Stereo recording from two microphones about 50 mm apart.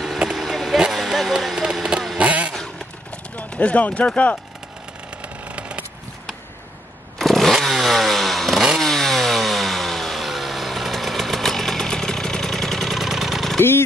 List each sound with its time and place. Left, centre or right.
0.4 s a sound: centre
2.1 s vehicle: right
3.3 s speech: left
5.4 s a sound: right
7.2 s vehicle: centre
8.8 s chainsaw: centre
13.6 s speech: left